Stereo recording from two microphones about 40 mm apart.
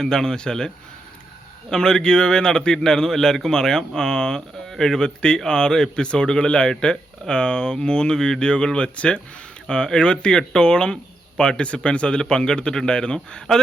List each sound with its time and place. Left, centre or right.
0.0 s a man's voice: centre
1.7 s a man's voice: centre